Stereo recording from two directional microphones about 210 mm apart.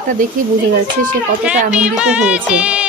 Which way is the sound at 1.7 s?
5° right (ahead or behind).